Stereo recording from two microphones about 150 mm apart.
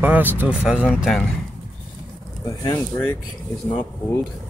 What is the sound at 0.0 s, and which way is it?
Speech, 10° right (ahead or behind).